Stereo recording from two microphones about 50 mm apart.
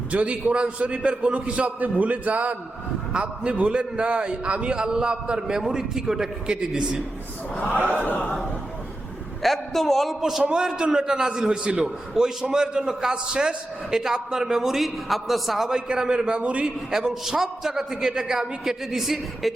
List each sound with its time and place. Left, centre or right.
0.1 s a man's voice: right
3.1 s a man's voice: right
7.5 s a man's voice: left
7.8 s speech: right
8.0 s a man's voice: left
9.4 s a man's voice: centre
10.2 s a man's voice: centre
15.9 s a man's voice: centre
16.9 s a man's voice: centre